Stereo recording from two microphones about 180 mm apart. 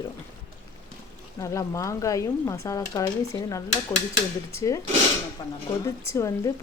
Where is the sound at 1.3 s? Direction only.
15° left (ahead or behind).